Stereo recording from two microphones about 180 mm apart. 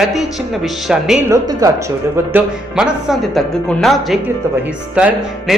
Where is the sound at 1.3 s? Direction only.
20° right (ahead or behind).